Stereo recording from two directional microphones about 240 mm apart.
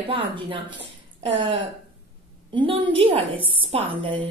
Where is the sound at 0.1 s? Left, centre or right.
Centre.